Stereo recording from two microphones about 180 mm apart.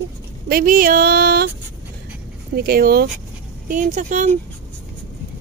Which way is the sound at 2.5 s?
55° right (ahead or behind).